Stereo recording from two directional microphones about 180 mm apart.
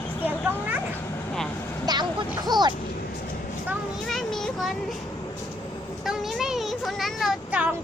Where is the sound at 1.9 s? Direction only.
20° right (ahead or behind).